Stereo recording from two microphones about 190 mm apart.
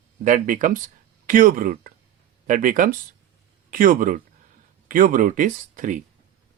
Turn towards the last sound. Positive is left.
turn(degrees=-40)  # may be behind; listen again after turning